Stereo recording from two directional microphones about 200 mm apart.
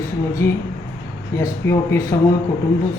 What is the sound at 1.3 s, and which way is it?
Speech, 15° left (ahead or behind).